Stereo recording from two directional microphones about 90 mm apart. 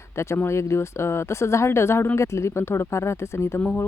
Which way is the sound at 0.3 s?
30° left (ahead or behind).